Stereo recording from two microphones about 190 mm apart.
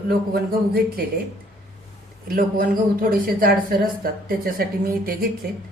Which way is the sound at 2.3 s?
50° right (ahead or behind).